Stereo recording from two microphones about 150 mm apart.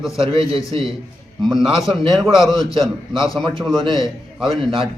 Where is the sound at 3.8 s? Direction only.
35° right (ahead or behind).